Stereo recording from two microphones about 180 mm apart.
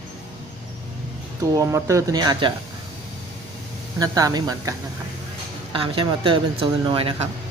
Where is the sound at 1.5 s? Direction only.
15° right (ahead or behind).